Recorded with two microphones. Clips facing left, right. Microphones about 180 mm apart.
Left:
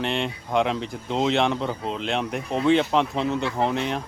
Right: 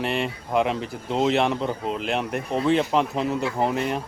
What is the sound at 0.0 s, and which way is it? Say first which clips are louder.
Speech: right 1 dB; 5° right (ahead or behind).